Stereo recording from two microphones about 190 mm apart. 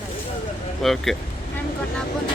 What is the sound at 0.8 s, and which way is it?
Speech, centre (ahead or behind).